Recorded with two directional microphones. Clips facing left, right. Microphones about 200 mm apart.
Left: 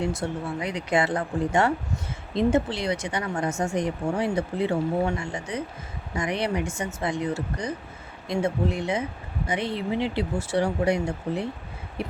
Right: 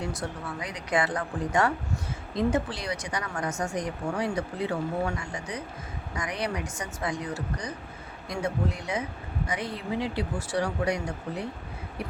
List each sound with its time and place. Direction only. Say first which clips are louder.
0.0 s speech: left 6 dB; 25° left (ahead or behind)